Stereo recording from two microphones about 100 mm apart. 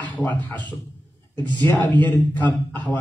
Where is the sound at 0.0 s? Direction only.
15° left (ahead or behind).